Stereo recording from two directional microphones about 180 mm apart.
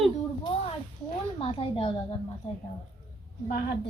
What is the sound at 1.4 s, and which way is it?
Speech, 35° left (ahead or behind).